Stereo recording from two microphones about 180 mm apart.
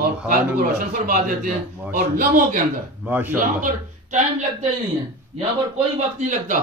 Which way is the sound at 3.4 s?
50° right (ahead or behind).